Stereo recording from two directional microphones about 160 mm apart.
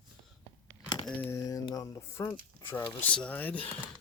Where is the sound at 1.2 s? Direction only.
15° left (ahead or behind).